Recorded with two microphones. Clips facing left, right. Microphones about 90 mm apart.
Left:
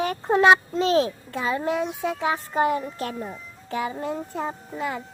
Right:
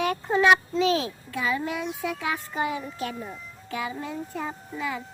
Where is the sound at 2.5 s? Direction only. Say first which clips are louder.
Left 6 dB; 45° left (ahead or behind).